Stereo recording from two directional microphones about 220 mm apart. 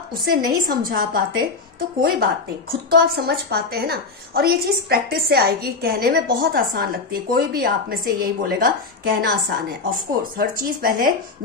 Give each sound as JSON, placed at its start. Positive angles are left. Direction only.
{"t": 0.1, "sound": "a woman's voice", "side_deg": -40}